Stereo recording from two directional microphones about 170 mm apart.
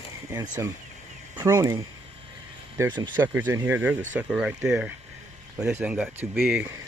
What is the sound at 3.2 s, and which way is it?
Speech, 10° right (ahead or behind).